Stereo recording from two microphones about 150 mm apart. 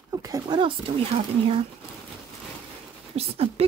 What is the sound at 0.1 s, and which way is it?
Speech, 25° right (ahead or behind).